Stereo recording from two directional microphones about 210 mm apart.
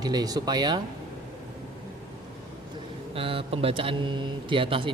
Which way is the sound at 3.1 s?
25° right (ahead or behind).